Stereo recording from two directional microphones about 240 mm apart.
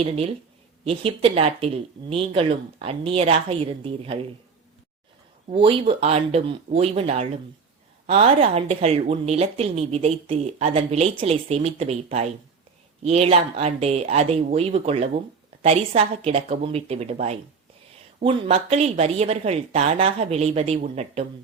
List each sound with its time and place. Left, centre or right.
0.9 s a woman's voice: right
5.5 s a woman's voice: right